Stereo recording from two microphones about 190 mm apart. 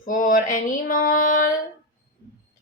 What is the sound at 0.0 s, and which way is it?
Mantra, 45° left (ahead or behind).